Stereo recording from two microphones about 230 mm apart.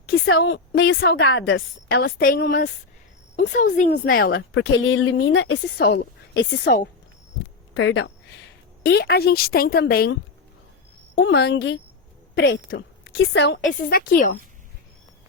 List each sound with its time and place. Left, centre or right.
0.1 s a woman's voice: left
0.9 s a woman's voice: left
1.1 s a woman's voice: left
4.5 s a woman's voice: left
7.3 s hum: left
8.8 s a woman's voice: left
13.9 s a woman's voice: left